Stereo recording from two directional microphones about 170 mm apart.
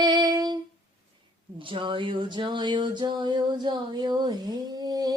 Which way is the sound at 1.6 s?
30° right (ahead or behind).